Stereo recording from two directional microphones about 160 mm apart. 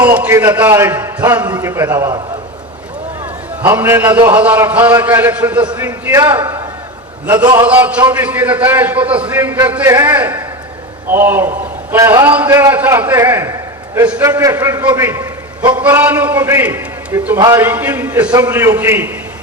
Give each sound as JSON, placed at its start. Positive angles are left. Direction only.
{"t": 0.2, "sound": "a man's voice", "side_deg": -15}
{"t": 3.6, "sound": "a man's voice", "side_deg": -15}
{"t": 7.4, "sound": "a man's voice", "side_deg": -25}
{"t": 7.7, "sound": "a man's voice", "side_deg": -10}